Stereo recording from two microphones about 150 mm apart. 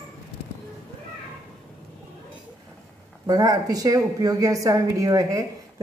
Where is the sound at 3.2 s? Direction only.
25° right (ahead or behind).